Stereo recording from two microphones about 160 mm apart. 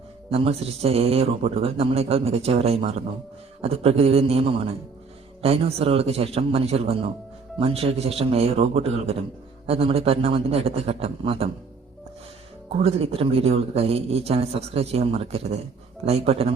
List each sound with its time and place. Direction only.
0.3 s speech: 40° right (ahead or behind)
12.7 s speech: 40° right (ahead or behind)